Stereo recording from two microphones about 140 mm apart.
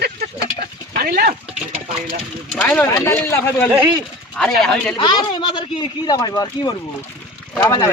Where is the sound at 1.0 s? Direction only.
90° right.